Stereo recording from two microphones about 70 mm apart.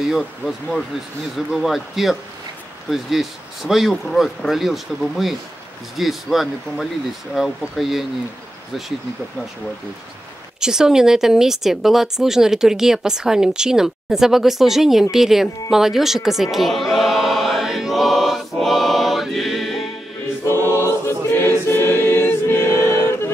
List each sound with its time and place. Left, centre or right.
1.5 s speech: centre
10.6 s speech: centre
16.5 s choir: centre
20.4 s choir: left